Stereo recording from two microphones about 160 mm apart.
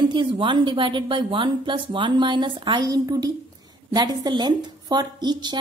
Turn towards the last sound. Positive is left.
turn(degrees=-25)  # may be behind; listen again after turning